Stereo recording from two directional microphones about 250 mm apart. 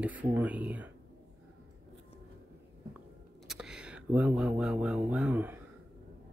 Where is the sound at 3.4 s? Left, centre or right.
Centre.